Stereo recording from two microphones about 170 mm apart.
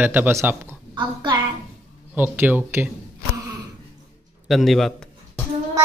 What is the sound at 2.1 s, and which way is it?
Speech, 10° right (ahead or behind).